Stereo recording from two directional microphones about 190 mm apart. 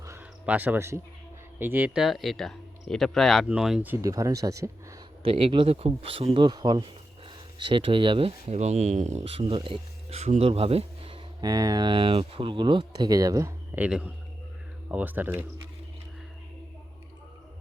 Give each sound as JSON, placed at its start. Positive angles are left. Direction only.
{"t": 0.0, "sound": "a sound", "side_deg": -10}
{"t": 1.5, "sound": "speech", "side_deg": -10}
{"t": 3.9, "sound": "speech", "side_deg": -20}
{"t": 5.2, "sound": "speech", "side_deg": -30}